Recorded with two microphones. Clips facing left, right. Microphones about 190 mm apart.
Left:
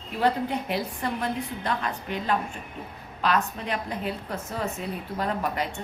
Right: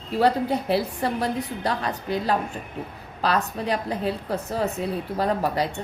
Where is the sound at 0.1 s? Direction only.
35° right (ahead or behind).